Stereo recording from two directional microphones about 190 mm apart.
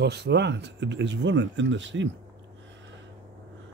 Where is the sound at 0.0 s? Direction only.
60° right (ahead or behind).